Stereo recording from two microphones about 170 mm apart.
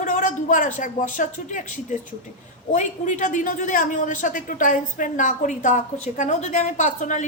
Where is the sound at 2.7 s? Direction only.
45° left (ahead or behind).